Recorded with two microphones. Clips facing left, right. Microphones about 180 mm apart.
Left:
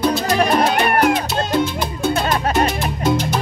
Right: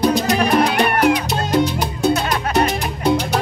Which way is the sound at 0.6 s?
45° left (ahead or behind).